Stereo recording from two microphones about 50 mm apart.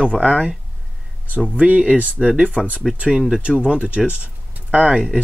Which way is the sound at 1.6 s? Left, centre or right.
Right.